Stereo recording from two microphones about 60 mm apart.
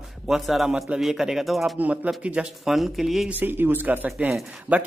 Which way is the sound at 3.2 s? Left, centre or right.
Right.